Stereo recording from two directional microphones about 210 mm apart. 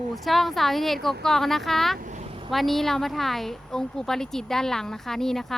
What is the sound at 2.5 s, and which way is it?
A woman's voice, centre (ahead or behind).